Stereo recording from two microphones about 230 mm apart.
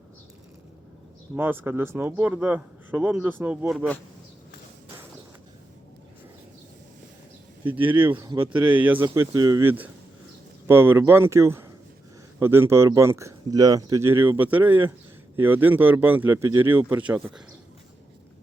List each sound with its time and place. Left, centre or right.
1.4 s speech: centre
7.8 s speech: right
8.6 s speech: centre